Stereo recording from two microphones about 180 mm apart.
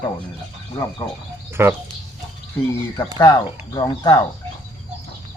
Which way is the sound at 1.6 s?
15° right (ahead or behind).